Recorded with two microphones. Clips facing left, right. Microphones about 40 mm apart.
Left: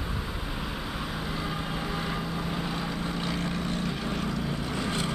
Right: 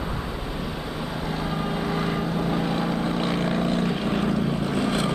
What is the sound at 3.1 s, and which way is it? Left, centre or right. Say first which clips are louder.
Vehicle: right 7 dB; right.